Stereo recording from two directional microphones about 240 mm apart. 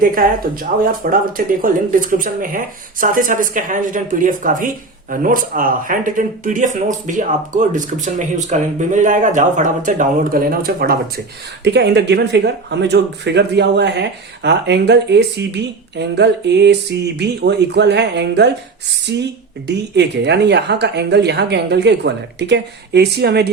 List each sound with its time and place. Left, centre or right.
0.0 s a woman's voice: right